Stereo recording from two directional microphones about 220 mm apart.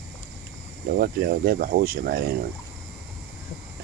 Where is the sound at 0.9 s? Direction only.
40° right (ahead or behind).